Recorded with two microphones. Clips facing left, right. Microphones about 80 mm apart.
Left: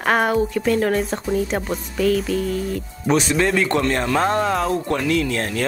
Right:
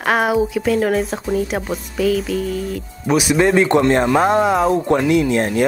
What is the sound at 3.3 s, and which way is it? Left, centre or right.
Speech, right.